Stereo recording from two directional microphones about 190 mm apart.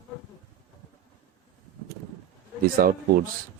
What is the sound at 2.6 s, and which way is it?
Speech, 50° right (ahead or behind).